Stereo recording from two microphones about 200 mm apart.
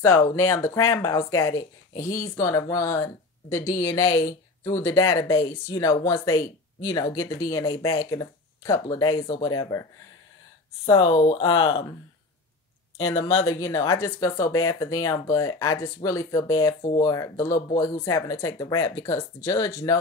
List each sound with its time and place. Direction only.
0.0 s speech: 15° left (ahead or behind)
10.9 s speech: 25° left (ahead or behind)
13.6 s speech: 15° left (ahead or behind)